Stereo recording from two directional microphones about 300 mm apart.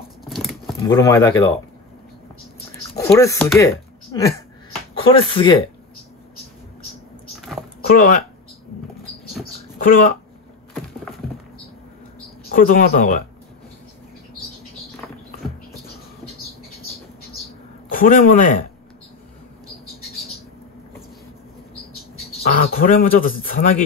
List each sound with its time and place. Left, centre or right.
0.2 s a sound: centre
0.8 s speech: centre
3.0 s speech: centre
9.4 s speech: left
12.5 s speech: left
17.8 s a man's voice: left
22.5 s speech: left